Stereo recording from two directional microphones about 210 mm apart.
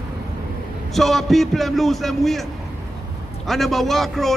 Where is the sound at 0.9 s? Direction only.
Centre (ahead or behind).